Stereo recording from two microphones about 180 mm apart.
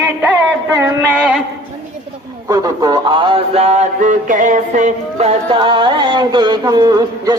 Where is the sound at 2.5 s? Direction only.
20° right (ahead or behind).